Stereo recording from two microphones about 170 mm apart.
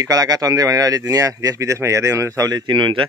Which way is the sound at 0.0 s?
20° right (ahead or behind).